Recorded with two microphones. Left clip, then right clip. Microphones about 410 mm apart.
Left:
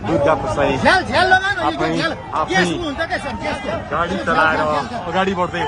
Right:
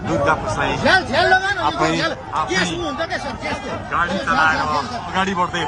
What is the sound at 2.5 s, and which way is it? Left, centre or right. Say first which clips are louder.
Speech: left 5 dB; centre.